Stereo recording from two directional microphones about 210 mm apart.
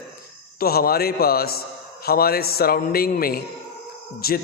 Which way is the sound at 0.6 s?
45° left (ahead or behind).